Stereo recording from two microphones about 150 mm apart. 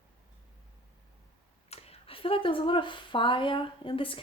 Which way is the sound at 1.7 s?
45° left (ahead or behind).